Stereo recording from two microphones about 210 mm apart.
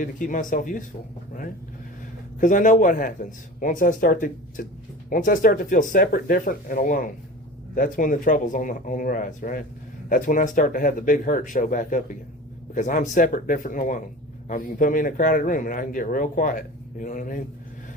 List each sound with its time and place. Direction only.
0.0 s speech: 40° left (ahead or behind)
2.4 s speech: 40° left (ahead or behind)